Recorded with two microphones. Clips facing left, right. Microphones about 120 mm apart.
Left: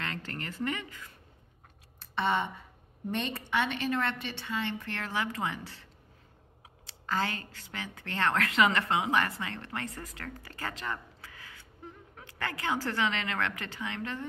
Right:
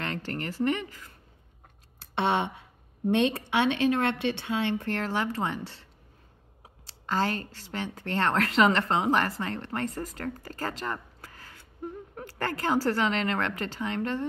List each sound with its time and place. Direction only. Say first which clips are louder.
0.0 s speech: right 5 dB; 35° right (ahead or behind)
2.0 s a woman's voice: right 3 dB; 70° right (ahead or behind)
4.9 s speech: right 5 dB; 35° right (ahead or behind)